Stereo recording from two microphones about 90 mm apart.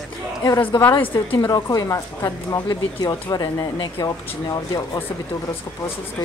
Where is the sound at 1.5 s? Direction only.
45° left (ahead or behind).